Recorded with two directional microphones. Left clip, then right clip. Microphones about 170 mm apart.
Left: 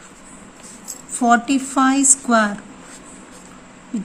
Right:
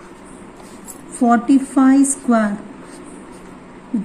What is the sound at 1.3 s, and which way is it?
Speech, 60° left (ahead or behind).